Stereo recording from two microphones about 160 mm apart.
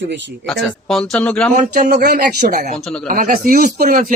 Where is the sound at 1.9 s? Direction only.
80° right.